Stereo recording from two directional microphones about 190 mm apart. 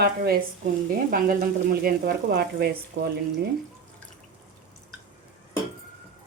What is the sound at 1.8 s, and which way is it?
Speech, 55° right (ahead or behind).